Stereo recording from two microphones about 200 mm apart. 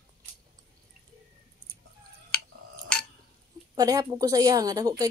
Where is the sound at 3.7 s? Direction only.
20° right (ahead or behind).